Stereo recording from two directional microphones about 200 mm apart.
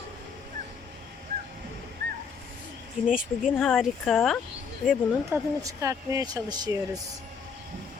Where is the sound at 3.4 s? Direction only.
Centre (ahead or behind); by 6.7 s 20° right (ahead or behind).